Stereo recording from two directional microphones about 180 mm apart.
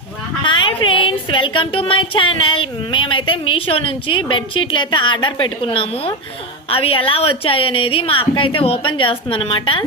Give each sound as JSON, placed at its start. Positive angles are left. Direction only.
{"t": 0.4, "sound": "a woman's voice", "side_deg": 25}